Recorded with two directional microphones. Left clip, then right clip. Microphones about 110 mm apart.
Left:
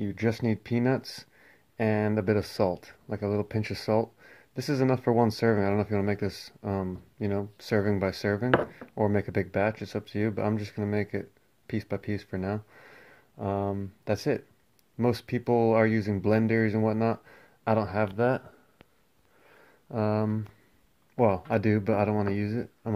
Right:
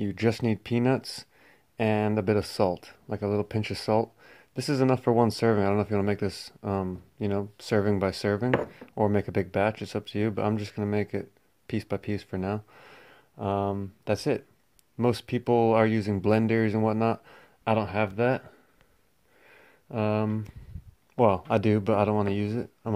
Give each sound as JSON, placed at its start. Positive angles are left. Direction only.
{"t": 0.0, "sound": "speech", "side_deg": -35}
{"t": 0.4, "sound": "speech", "side_deg": -20}
{"t": 19.4, "sound": "a sound", "side_deg": -30}
{"t": 21.3, "sound": "speech", "side_deg": -20}